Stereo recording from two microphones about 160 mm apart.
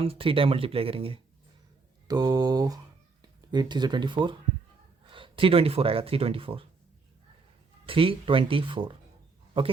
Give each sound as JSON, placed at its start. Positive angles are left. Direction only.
{"t": 0.0, "sound": "speech", "side_deg": -35}
{"t": 2.0, "sound": "speech", "side_deg": -25}
{"t": 7.9, "sound": "speech", "side_deg": -35}